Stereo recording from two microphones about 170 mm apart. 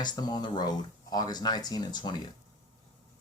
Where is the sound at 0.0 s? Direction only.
25° left (ahead or behind).